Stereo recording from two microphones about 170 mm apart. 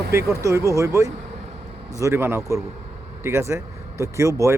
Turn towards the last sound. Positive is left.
turn(degrees=-15)  # may be behind; listen again after turning